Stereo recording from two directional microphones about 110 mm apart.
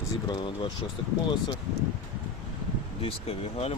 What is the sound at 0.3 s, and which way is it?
Speech, 45° left (ahead or behind).